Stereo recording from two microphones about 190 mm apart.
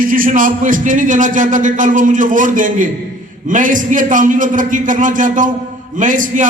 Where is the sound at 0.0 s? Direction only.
45° right (ahead or behind).